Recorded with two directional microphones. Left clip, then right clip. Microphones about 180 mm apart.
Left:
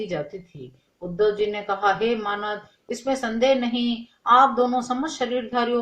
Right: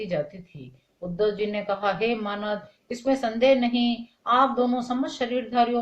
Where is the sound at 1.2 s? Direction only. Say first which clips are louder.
Left 3 dB; 45° left (ahead or behind).